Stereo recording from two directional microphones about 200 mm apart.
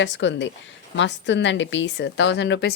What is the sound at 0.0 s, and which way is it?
A woman's voice, 65° left (ahead or behind).